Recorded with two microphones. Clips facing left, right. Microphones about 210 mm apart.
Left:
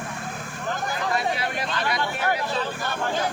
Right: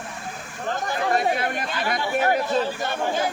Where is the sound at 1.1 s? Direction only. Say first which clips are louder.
Right 4 dB; 50° right (ahead or behind).